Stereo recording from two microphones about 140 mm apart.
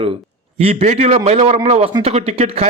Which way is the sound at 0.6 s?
45° right (ahead or behind).